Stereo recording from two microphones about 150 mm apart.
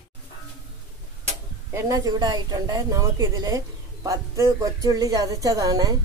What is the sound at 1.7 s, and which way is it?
Speech, 25° right (ahead or behind).